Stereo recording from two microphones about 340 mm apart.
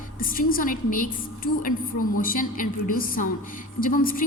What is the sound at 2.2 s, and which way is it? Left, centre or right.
A woman's voice, left.